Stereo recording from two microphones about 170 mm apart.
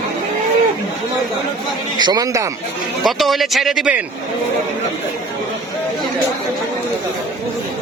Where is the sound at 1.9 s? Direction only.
25° right (ahead or behind).